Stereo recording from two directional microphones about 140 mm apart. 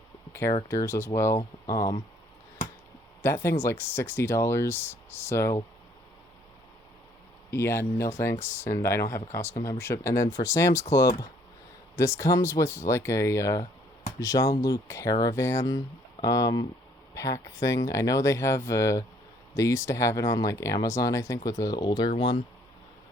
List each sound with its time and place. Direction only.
0.7 s speech: 20° left (ahead or behind)
3.2 s speech: 20° left (ahead or behind)
7.5 s speech: 15° left (ahead or behind)